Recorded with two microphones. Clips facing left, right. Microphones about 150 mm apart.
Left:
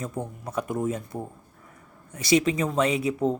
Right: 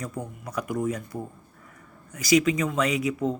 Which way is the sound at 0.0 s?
25° left (ahead or behind).